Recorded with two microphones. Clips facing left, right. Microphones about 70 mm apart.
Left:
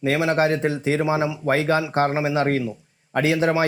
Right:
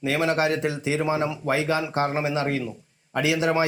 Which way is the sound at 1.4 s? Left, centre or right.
Left.